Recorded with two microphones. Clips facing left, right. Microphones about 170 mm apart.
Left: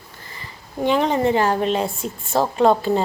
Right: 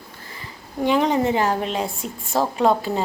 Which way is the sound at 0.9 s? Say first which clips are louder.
Left 1 dB; 10° right (ahead or behind).